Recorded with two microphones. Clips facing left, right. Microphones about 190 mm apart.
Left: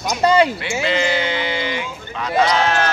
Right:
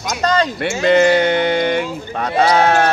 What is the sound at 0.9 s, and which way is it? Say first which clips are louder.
Sheep: right 9 dB; 55° right (ahead or behind).